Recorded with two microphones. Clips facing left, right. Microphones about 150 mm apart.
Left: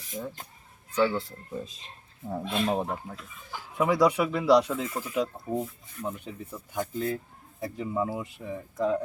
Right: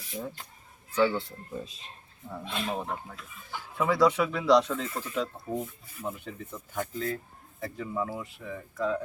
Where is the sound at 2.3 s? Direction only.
35° left (ahead or behind).